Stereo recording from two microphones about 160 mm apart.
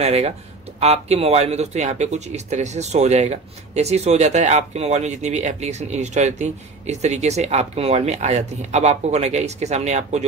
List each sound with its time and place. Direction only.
0.0 s speech: 40° right (ahead or behind)